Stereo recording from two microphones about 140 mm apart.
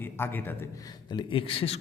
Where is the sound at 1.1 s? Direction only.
40° left (ahead or behind).